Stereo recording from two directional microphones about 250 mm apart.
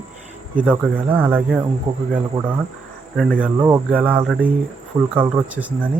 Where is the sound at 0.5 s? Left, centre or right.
Centre.